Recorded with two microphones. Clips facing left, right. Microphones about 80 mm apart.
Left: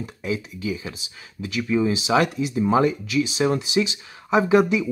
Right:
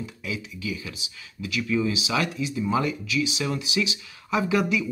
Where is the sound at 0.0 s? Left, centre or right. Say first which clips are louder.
Left 5 dB; left.